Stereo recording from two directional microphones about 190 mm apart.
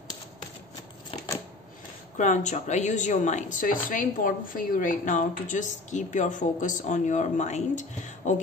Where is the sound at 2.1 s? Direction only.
40° left (ahead or behind).